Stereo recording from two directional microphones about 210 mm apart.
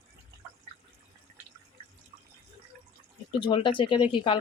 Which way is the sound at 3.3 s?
20° left (ahead or behind).